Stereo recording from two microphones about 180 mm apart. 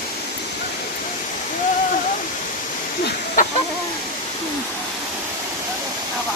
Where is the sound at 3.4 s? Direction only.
50° left (ahead or behind).